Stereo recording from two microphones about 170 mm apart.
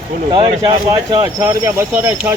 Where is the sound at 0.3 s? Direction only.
30° right (ahead or behind).